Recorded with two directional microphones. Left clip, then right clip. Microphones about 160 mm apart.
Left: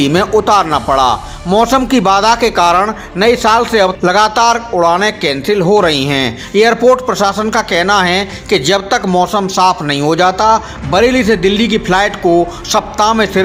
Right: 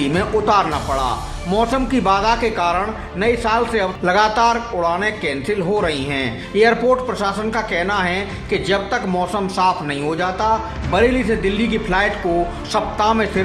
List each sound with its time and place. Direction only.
0.0 s a man's voice: 40° left (ahead or behind)